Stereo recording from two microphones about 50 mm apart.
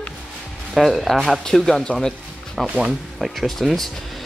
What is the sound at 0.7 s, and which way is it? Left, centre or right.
Speech, centre.